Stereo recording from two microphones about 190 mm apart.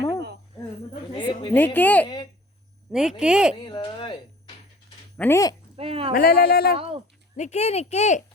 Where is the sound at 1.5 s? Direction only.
10° left (ahead or behind).